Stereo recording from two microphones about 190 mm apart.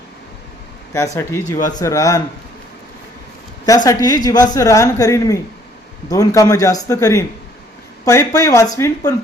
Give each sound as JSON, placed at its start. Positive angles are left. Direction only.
{"t": 0.9, "sound": "a woman's voice", "side_deg": 15}
{"t": 1.5, "sound": "speech", "side_deg": 40}
{"t": 1.8, "sound": "a woman's voice", "side_deg": 15}
{"t": 3.8, "sound": "a woman's voice", "side_deg": 20}